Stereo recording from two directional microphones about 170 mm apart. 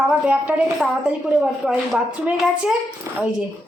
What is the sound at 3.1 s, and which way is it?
Speech, 15° right (ahead or behind).